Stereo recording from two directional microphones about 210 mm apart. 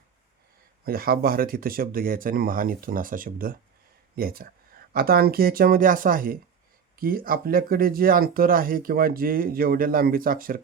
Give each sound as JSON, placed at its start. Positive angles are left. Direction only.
{"t": 0.9, "sound": "speech", "side_deg": -45}